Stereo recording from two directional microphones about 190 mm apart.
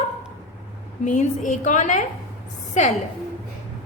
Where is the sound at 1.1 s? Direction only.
40° left (ahead or behind).